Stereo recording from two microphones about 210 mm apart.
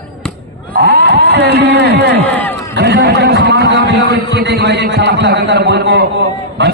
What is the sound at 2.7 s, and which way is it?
A man's voice, 55° right (ahead or behind).